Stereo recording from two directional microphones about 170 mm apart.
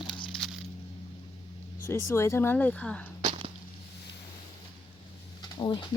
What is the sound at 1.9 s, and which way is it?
Speech, 15° left (ahead or behind).